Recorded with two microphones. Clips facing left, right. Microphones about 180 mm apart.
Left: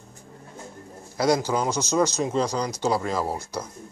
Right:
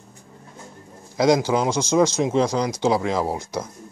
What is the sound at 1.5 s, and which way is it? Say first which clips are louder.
Speech: right 4 dB; 10° right (ahead or behind).